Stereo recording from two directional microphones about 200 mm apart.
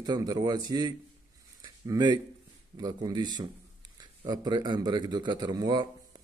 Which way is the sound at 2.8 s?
20° right (ahead or behind).